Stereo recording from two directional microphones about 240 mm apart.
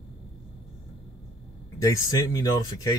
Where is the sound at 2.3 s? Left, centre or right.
Centre.